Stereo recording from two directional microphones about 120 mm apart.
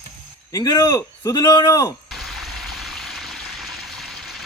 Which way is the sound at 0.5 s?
30° left (ahead or behind).